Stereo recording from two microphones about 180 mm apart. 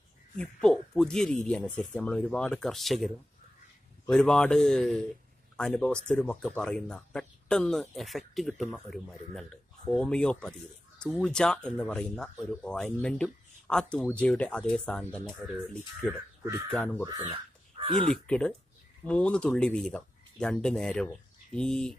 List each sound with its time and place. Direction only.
0.4 s speech: 5° left (ahead or behind)
4.1 s speech: 5° left (ahead or behind)
16.4 s speech: 15° right (ahead or behind)
16.7 s speech: 10° left (ahead or behind)
17.0 s speech: 20° right (ahead or behind)
18.0 s speech: 5° left (ahead or behind)